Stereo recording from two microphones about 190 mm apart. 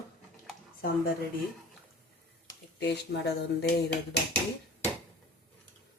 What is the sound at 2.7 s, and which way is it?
Speech, 60° left (ahead or behind).